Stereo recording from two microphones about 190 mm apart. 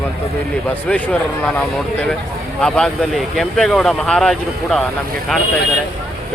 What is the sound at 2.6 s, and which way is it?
Speech, centre (ahead or behind).